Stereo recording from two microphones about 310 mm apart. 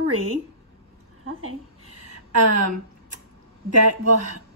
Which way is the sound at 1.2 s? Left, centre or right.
Right.